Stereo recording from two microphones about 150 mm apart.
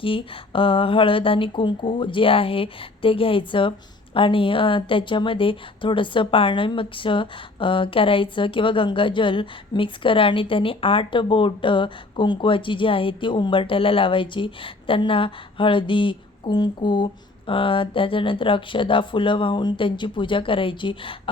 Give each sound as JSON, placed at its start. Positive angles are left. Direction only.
{"t": 0.0, "sound": "speech", "side_deg": 35}